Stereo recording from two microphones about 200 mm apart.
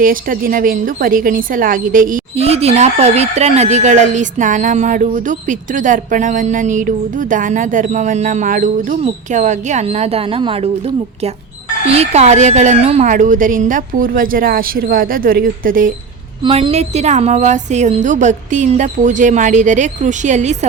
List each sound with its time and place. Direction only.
0.0 s a woman's voice: 45° right (ahead or behind)
16.4 s a woman's voice: 25° right (ahead or behind)